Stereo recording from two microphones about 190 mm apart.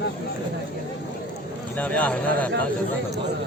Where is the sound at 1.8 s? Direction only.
5° left (ahead or behind).